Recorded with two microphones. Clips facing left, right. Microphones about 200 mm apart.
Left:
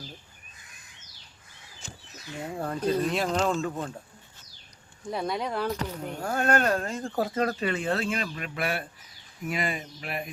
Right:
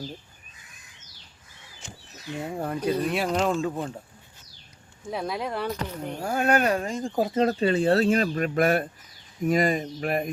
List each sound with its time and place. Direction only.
2.6 s speech: 10° right (ahead or behind)
5.1 s speech: centre (ahead or behind); by 10.3 s 45° right (ahead or behind)